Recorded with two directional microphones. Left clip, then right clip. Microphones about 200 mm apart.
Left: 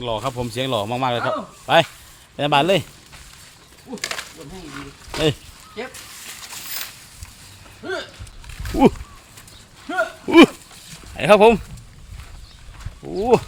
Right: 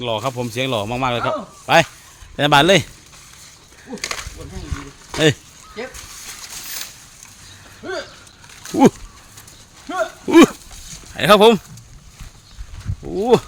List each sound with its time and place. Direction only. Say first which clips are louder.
0.0 s speech: right 2 dB; 20° right (ahead or behind)
2.3 s a man's voice: right 4 dB; 40° right (ahead or behind)
3.9 s a sound: right 1 dB; centre (ahead or behind)
7.8 s speech: even; 5° right (ahead or behind)
9.9 s a sound: even; 10° right (ahead or behind)
10.2 s livestock: right 1 dB; 25° right (ahead or behind)
11.1 s speech: right 1 dB; 25° right (ahead or behind)
13.1 s speech: right 2 dB; 25° right (ahead or behind)